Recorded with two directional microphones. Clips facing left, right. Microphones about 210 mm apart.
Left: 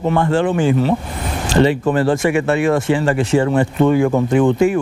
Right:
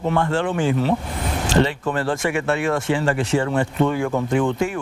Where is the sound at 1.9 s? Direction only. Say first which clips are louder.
Left 7 dB; 5° left (ahead or behind).